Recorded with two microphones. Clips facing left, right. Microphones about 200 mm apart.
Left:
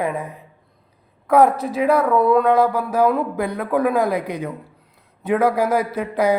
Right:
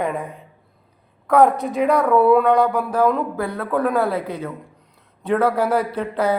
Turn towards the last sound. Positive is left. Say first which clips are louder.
# left 2 dB
turn(degrees=10)  # may be behind; listen again after turning